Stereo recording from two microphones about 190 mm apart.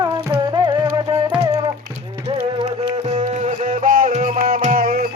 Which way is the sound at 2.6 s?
30° right (ahead or behind).